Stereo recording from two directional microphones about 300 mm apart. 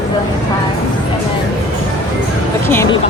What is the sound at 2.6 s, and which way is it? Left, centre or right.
Speech, centre.